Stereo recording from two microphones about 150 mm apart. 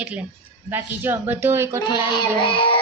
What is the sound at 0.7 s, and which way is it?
Speech, 15° right (ahead or behind).